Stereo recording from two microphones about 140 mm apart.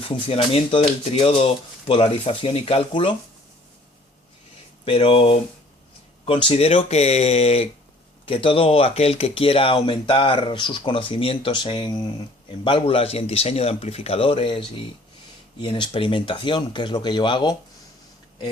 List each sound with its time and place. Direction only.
0.0 s speech: 40° left (ahead or behind)
4.9 s speech: 40° left (ahead or behind)
15.6 s speech: 35° left (ahead or behind)